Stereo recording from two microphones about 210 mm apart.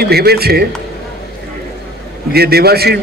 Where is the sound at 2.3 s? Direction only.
50° right (ahead or behind).